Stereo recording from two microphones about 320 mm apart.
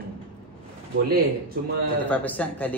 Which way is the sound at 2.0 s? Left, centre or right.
Centre.